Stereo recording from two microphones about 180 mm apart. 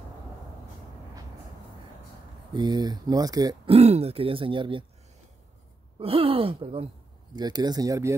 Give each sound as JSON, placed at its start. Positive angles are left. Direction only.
{"t": 2.5, "sound": "speech", "side_deg": -25}
{"t": 3.7, "sound": "speech", "side_deg": -35}
{"t": 5.9, "sound": "speech", "side_deg": -30}